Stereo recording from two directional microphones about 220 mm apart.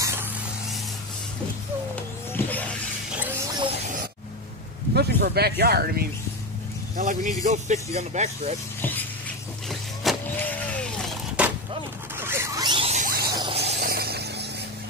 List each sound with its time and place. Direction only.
0.0 s a sound: 10° right (ahead or behind)
2.3 s vehicle: 5° left (ahead or behind)
4.9 s speech: 45° right (ahead or behind)
7.0 s speech: 35° right (ahead or behind)
9.7 s vehicle: 5° left (ahead or behind)
11.4 s a sound: 5° right (ahead or behind)
12.2 s zipper: 10° right (ahead or behind); by 13.3 s 40° right (ahead or behind)
13.3 s squeal: 20° right (ahead or behind)
13.6 s a sound: 50° right (ahead or behind)